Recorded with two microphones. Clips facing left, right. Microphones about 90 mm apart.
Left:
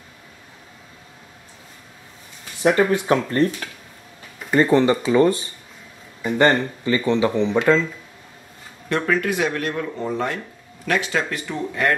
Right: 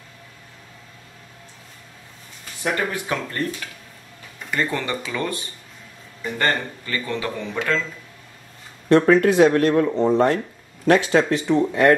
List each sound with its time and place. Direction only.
2.6 s speech: 25° left (ahead or behind)
4.5 s speech: 30° left (ahead or behind)
6.2 s speech: 20° left (ahead or behind)
8.8 s speech: 30° right (ahead or behind)